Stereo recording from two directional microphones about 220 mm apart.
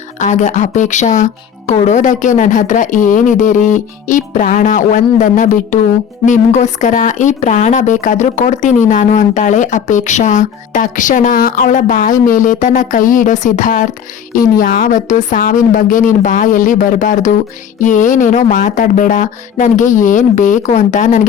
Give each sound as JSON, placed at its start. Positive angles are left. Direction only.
{"t": 0.2, "sound": "speech", "side_deg": 35}